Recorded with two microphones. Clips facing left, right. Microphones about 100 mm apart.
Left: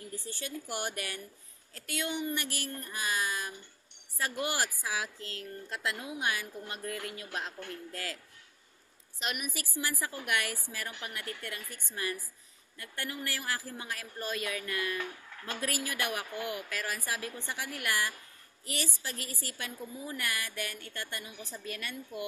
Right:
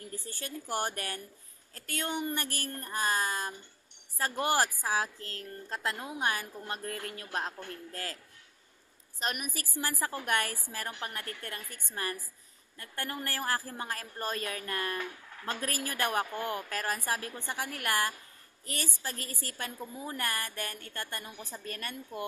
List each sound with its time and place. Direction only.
0.1 s a woman's voice: 40° right (ahead or behind)
9.2 s a woman's voice: 40° right (ahead or behind)